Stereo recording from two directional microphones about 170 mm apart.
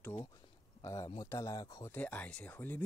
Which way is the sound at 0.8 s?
20° left (ahead or behind).